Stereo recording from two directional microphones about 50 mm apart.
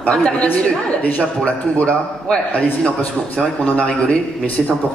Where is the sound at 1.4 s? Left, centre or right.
Left.